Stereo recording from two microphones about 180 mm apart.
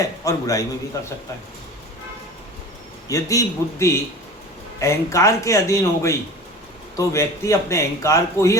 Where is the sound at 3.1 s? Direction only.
15° left (ahead or behind).